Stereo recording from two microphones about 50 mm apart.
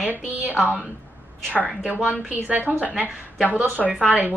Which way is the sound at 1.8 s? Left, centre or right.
Right.